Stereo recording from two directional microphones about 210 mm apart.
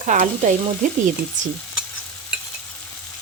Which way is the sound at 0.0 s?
35° right (ahead or behind).